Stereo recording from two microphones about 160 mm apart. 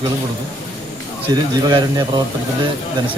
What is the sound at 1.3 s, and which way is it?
Speech, 25° right (ahead or behind).